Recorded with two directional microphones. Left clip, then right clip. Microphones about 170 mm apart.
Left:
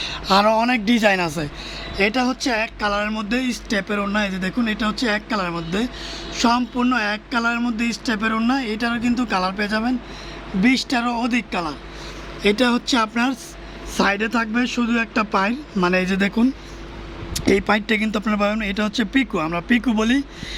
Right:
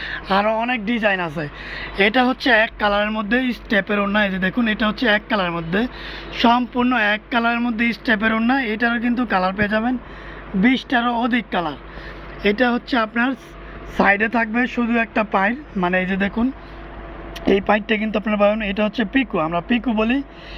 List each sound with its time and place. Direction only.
0.1 s speech: 20° left (ahead or behind)
1.8 s speech: 5° right (ahead or behind)
12.4 s speech: 10° left (ahead or behind)
15.4 s speech: 20° left (ahead or behind)
16.2 s speech: 25° left (ahead or behind)
17.3 s speech: 5° left (ahead or behind)